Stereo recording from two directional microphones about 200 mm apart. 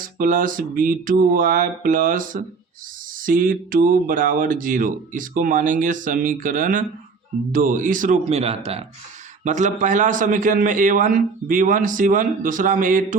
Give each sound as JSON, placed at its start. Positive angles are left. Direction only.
{"t": 0.0, "sound": "a man's voice", "side_deg": -45}